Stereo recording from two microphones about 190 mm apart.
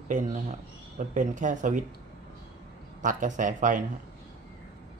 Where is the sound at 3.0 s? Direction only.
40° right (ahead or behind).